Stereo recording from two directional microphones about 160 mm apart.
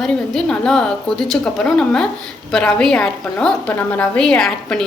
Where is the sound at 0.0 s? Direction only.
5° left (ahead or behind).